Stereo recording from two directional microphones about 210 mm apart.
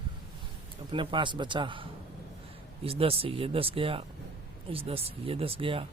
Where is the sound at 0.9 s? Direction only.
20° right (ahead or behind).